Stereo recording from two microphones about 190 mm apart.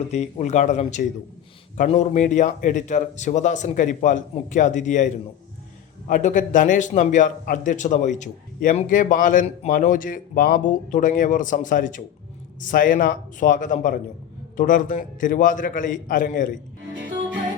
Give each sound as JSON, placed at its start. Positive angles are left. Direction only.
{"t": 0.1, "sound": "a man's voice", "side_deg": 35}